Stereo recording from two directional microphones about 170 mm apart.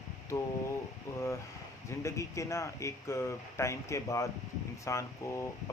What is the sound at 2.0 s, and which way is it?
A man's voice, 15° left (ahead or behind).